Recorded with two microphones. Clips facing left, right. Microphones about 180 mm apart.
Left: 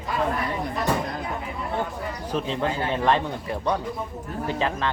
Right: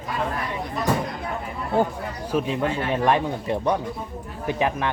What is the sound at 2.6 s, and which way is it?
Speech, 30° left (ahead or behind).